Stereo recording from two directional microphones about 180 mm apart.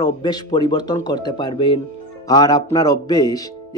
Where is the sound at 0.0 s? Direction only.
25° left (ahead or behind).